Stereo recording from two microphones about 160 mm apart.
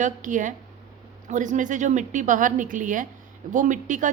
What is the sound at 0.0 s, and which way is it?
A woman's voice, 55° right (ahead or behind).